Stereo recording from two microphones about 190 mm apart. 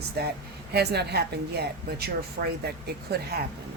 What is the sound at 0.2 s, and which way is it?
A woman's voice, 55° right (ahead or behind).